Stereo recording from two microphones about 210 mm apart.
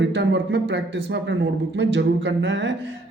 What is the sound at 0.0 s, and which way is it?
A man's voice, 55° right (ahead or behind).